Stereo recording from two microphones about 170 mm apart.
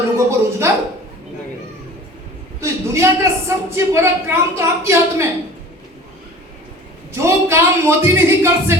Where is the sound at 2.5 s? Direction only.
15° right (ahead or behind).